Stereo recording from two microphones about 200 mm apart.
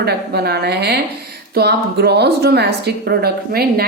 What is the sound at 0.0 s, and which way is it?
A woman's voice, 55° right (ahead or behind).